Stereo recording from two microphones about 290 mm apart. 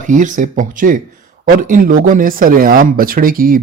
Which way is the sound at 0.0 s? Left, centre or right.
Right.